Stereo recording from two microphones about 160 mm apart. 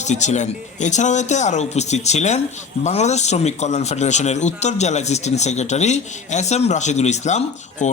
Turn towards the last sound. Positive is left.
turn(degrees=50)  # may be behind; listen again after turning